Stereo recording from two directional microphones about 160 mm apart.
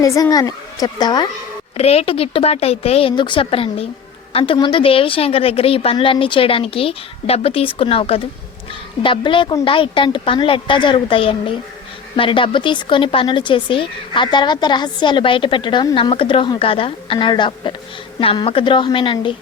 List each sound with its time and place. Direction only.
0.0 s a woman's voice: 20° left (ahead or behind)
1.7 s speech: 40° left (ahead or behind)